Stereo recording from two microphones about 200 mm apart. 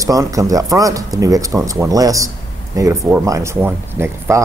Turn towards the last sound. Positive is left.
turn(degrees=-15)  # may be behind; listen again after turning